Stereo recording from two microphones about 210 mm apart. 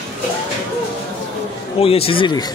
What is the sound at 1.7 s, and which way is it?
Speech, 25° left (ahead or behind).